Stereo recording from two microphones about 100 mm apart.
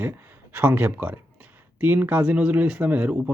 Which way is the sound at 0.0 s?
20° right (ahead or behind).